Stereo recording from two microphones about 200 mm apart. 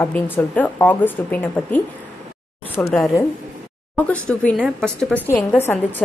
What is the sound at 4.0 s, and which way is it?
Speech, 5° left (ahead or behind).